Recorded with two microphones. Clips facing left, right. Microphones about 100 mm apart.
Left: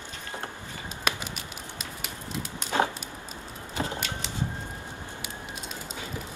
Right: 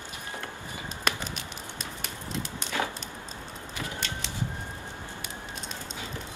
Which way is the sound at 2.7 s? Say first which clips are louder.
Left 6 dB; 35° left (ahead or behind).